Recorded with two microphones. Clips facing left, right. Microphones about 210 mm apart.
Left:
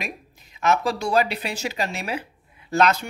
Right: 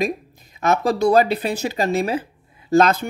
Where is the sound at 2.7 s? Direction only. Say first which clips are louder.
Right 5 dB; 45° right (ahead or behind).